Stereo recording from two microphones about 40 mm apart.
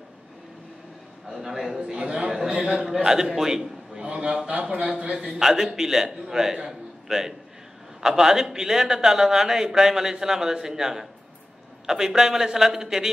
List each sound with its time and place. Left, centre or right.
1.4 s a man's voice: centre
1.9 s a man's voice: centre
4.0 s speech: right
5.2 s a man's voice: centre